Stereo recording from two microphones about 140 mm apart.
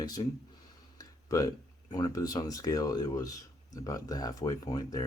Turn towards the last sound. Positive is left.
turn(degrees=25)  # may be behind; listen again after turning